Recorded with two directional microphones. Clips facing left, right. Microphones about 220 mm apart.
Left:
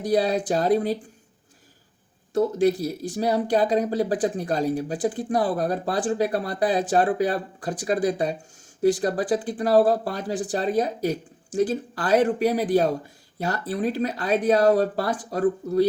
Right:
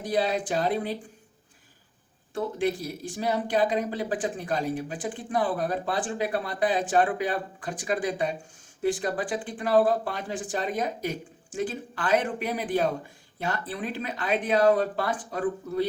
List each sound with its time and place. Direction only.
0.0 s speech: 40° left (ahead or behind)
2.3 s speech: 40° left (ahead or behind)